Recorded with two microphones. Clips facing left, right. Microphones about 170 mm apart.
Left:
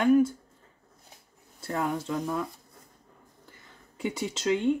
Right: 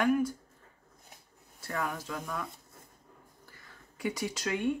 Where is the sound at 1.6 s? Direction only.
25° left (ahead or behind).